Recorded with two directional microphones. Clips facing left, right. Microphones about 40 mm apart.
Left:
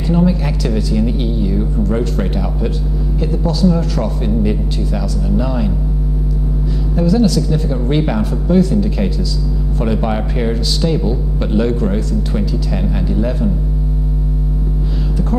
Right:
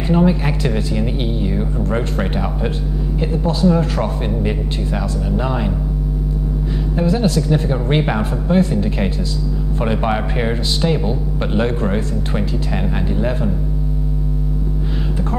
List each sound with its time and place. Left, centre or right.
0.1 s speech: right
7.0 s speech: right
13.2 s speech: right